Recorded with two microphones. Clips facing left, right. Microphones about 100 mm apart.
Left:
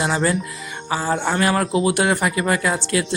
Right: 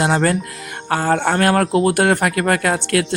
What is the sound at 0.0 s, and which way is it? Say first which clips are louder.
A man's voice: right 3 dB; 55° right (ahead or behind).